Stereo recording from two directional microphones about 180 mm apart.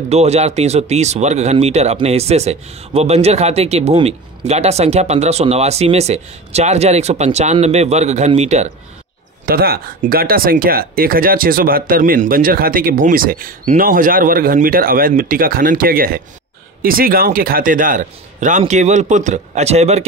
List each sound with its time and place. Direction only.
0.1 s speech: 35° right (ahead or behind)
9.5 s speech: 55° right (ahead or behind); by 20.1 s 35° right (ahead or behind)